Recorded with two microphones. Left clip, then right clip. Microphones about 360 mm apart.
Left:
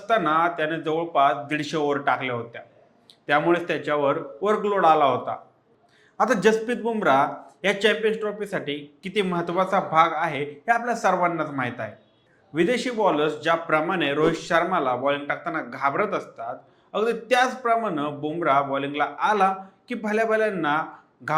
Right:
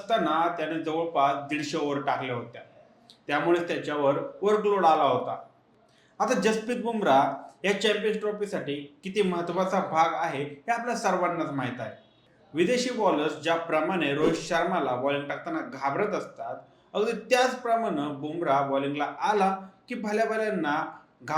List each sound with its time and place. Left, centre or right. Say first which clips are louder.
0.1 s speech: left 4 dB; left
6.1 s speech: left 5 dB; left